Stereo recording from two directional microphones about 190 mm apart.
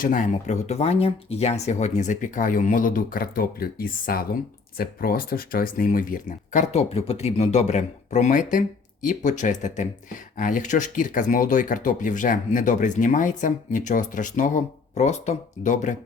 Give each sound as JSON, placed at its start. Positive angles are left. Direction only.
{"t": 0.0, "sound": "speech", "side_deg": 45}